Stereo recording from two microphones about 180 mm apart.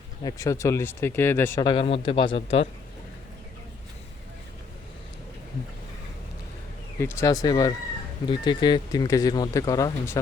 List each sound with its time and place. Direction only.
0.2 s speech: 20° left (ahead or behind)
1.6 s a man's voice: 30° left (ahead or behind)
7.0 s speech: 15° left (ahead or behind)